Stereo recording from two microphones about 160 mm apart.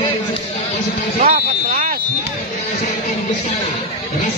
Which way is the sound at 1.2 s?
50° right (ahead or behind).